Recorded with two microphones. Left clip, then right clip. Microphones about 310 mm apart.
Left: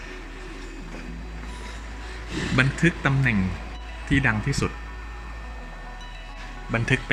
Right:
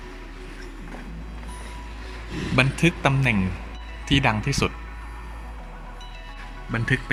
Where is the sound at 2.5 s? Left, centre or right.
Centre.